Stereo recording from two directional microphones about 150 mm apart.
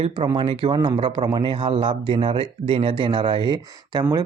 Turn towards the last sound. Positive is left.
turn(degrees=-25)  # may be behind; listen again after turning